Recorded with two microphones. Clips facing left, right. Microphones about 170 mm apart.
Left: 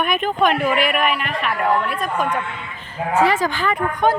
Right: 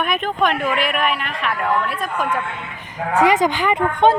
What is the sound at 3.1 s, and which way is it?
A woman's voice, 15° right (ahead or behind).